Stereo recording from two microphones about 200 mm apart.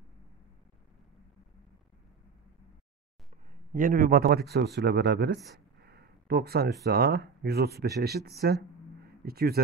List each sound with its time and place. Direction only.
3.7 s speech: 45° right (ahead or behind)